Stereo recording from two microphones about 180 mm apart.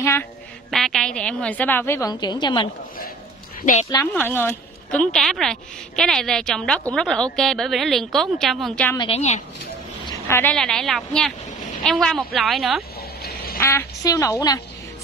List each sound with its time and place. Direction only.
0.0 s a woman's voice: 15° left (ahead or behind)
0.7 s a woman's voice: centre (ahead or behind); by 2.7 s 25° left (ahead or behind)
4.1 s a woman's voice: 10° left (ahead or behind)
8.9 s a woman's voice: 25° left (ahead or behind)
10.0 s a sound: 15° left (ahead or behind)
10.5 s a woman's voice: 5° left (ahead or behind)
13.6 s a woman's voice: 15° left (ahead or behind)